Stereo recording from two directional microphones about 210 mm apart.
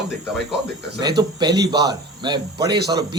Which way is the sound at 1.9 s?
20° right (ahead or behind).